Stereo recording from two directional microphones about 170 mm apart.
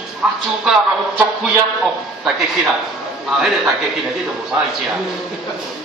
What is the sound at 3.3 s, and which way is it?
Speech, 5° right (ahead or behind).